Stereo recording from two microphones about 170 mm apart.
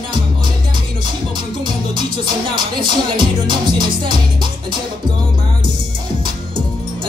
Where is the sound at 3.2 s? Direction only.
25° right (ahead or behind).